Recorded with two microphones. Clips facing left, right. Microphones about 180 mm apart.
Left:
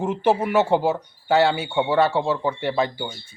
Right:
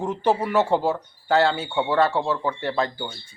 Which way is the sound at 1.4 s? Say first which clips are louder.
Left 2 dB; 10° left (ahead or behind).